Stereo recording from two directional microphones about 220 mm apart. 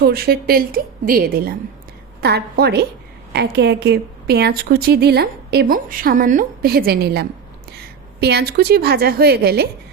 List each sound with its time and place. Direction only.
0.0 s a woman's voice: 45° right (ahead or behind)